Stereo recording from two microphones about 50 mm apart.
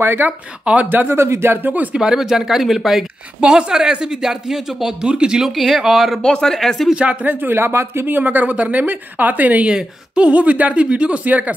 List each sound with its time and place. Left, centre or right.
0.0 s speech: right
0.7 s speech: right
1.0 s speech: right
2.0 s speech: centre
3.3 s speech: centre
5.4 s speech: centre
6.2 s speech: centre
7.2 s speech: right
8.1 s speech: right
9.7 s speech: centre